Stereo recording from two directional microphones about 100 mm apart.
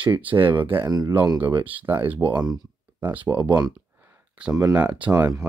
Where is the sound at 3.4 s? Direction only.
45° right (ahead or behind).